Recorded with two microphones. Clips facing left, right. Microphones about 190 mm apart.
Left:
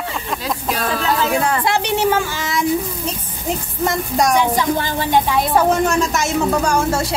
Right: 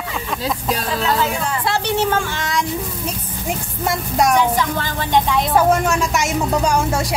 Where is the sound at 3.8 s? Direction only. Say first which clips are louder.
Even; 5° right (ahead or behind).